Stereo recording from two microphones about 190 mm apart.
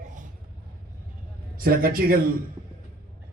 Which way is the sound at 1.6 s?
50° right (ahead or behind).